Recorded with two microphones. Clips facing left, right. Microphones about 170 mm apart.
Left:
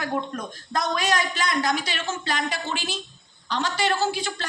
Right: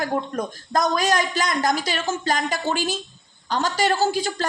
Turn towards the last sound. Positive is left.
turn(degrees=-40)  # may be behind; listen again after turning